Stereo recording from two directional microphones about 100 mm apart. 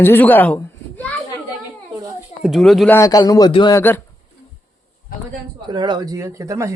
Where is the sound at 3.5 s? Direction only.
50° left (ahead or behind).